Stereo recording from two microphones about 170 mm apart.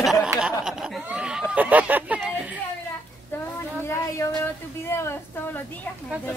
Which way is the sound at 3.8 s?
15° left (ahead or behind).